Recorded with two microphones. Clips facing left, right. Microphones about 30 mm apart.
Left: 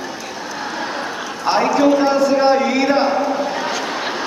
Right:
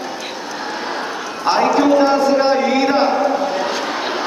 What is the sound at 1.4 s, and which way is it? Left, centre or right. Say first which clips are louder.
A man's voice: right 1 dB; centre.